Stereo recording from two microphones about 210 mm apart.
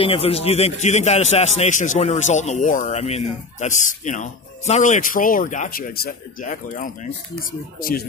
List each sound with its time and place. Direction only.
0.0 s a man's voice: 25° left (ahead or behind)